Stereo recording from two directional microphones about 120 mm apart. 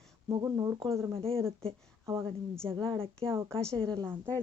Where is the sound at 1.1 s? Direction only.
50° right (ahead or behind).